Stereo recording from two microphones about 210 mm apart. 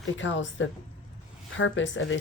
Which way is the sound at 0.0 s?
60° left (ahead or behind).